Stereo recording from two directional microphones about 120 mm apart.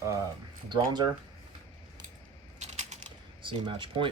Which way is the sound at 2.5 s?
70° right (ahead or behind).